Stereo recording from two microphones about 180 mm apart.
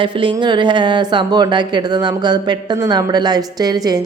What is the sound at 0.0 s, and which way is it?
A woman's voice, 25° right (ahead or behind).